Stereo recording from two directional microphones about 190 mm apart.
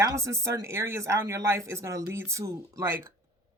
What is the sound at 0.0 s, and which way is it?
Speech, 15° right (ahead or behind).